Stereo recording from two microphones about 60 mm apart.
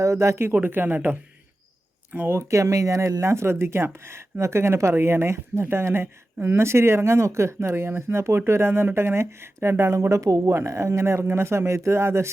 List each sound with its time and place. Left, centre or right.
0.0 s speech: right
2.4 s speech: right
10.5 s speech: right